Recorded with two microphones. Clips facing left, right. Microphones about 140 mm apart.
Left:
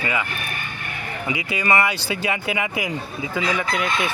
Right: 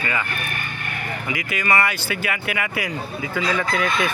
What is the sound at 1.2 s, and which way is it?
Speech, 25° left (ahead or behind).